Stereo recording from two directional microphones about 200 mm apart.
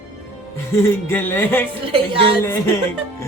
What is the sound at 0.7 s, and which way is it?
Speech, 10° left (ahead or behind).